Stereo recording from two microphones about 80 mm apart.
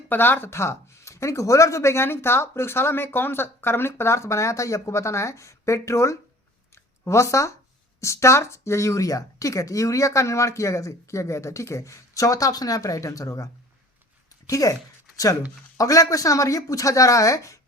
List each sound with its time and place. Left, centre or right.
0.1 s speech: left
15.1 s a sound: left
15.8 s speech: left